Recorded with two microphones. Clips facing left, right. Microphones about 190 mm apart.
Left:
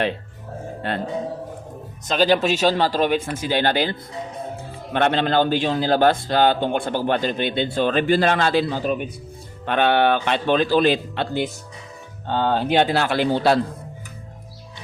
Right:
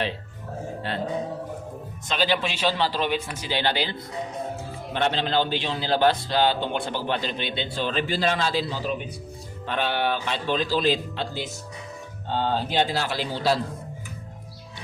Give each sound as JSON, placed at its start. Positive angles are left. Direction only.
{"t": 0.8, "sound": "music", "side_deg": 55}
{"t": 2.0, "sound": "a man's voice", "side_deg": 45}
{"t": 4.9, "sound": "a man's voice", "side_deg": 55}